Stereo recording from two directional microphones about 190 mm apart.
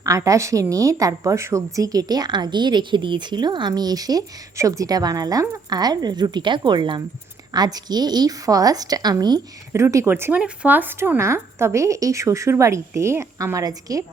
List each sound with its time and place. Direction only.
0.0 s a woman's voice: 15° right (ahead or behind)